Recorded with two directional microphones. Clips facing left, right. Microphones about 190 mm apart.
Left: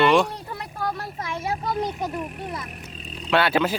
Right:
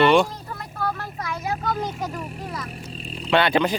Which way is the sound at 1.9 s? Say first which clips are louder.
Left 2 dB; 5° left (ahead or behind).